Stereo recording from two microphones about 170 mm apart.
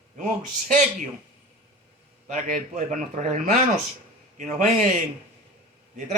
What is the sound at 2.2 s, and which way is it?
Speech, 50° right (ahead or behind).